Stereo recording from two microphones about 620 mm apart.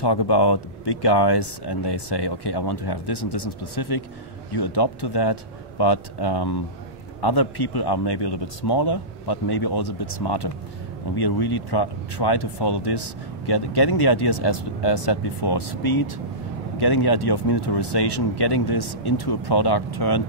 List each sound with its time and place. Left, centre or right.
0.0 s speech: left